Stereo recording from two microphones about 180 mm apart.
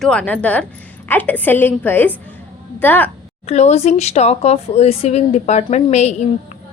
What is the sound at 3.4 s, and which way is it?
A woman's voice, 35° left (ahead or behind).